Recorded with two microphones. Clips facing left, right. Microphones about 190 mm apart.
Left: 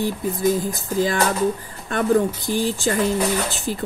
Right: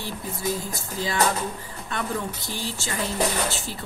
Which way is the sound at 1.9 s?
50° left (ahead or behind).